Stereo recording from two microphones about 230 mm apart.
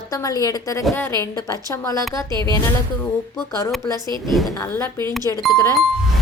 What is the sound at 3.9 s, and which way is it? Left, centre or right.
Speech, centre.